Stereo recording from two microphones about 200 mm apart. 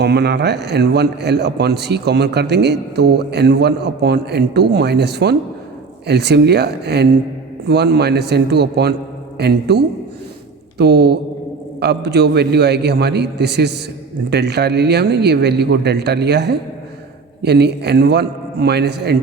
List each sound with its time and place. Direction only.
0.0 s a man's voice: 55° right (ahead or behind)